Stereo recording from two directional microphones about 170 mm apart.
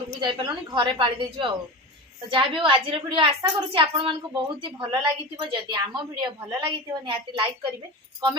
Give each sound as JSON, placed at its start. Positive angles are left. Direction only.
{"t": 0.2, "sound": "a woman's voice", "side_deg": -25}